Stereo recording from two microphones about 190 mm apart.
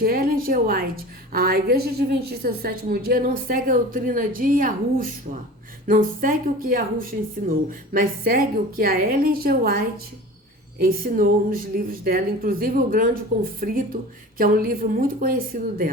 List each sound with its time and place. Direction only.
0.0 s a woman's voice: 50° right (ahead or behind)